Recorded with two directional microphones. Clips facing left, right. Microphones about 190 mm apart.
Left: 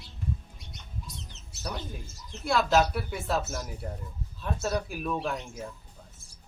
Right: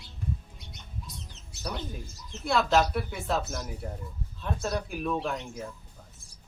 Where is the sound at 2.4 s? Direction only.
Centre (ahead or behind).